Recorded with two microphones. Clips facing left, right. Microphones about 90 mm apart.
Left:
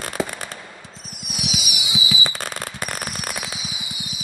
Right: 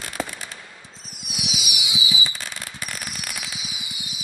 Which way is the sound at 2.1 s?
60° left (ahead or behind).